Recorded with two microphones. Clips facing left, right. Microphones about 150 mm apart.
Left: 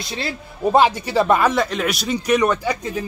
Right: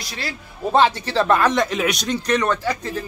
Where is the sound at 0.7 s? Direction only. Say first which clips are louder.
Left 1 dB; 10° left (ahead or behind).